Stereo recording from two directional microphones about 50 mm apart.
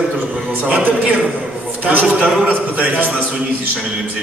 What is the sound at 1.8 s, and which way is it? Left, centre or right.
Speech, right.